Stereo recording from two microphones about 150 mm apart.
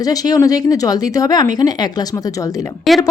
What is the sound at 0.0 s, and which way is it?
A woman's voice, 25° left (ahead or behind).